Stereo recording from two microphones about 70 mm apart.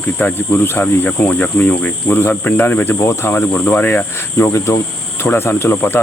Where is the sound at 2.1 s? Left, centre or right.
Left.